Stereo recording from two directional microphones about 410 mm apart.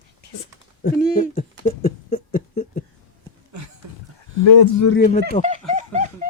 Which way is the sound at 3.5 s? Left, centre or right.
Right.